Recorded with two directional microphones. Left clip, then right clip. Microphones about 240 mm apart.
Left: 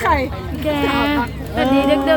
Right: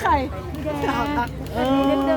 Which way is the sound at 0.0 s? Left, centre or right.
Centre.